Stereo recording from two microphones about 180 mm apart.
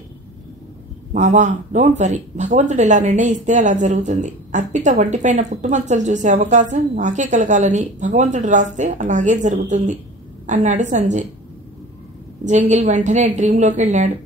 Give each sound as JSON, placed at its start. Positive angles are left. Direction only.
{"t": 1.1, "sound": "a woman's voice", "side_deg": -40}
{"t": 12.4, "sound": "a woman's voice", "side_deg": -40}